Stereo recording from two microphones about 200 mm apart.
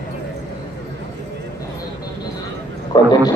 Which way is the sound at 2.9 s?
20° left (ahead or behind).